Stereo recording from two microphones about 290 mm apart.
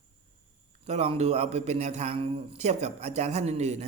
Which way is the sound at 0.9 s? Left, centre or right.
Right.